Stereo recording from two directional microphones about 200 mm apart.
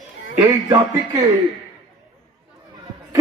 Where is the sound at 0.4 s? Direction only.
15° right (ahead or behind).